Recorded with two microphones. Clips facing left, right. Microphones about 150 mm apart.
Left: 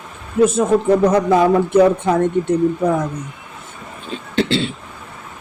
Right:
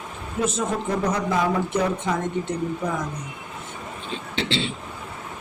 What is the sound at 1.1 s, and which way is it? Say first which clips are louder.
Speech: left 9 dB; 55° left (ahead or behind).